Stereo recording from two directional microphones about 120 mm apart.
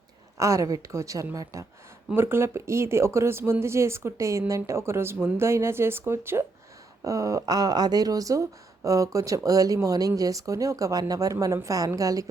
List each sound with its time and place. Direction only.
0.3 s speech: 25° right (ahead or behind)